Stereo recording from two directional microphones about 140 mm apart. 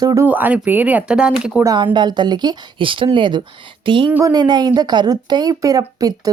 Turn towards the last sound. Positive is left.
turn(degrees=-25)  # may be behind; listen again after turning